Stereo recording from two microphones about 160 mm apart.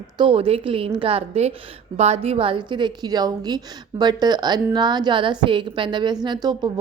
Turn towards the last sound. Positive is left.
turn(degrees=-25)  # may be behind; listen again after turning